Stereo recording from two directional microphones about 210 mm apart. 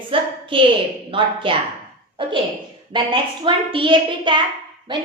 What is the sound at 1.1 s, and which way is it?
Speech, 25° right (ahead or behind).